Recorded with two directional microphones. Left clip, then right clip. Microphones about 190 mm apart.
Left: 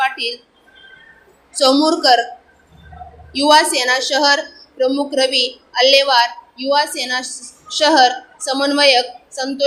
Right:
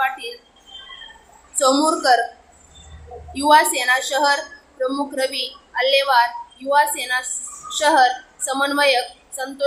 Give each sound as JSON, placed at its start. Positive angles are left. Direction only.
{"t": 0.0, "sound": "a sound", "side_deg": 20}
{"t": 1.5, "sound": "a woman's voice", "side_deg": 15}
{"t": 3.3, "sound": "a woman's voice", "side_deg": 15}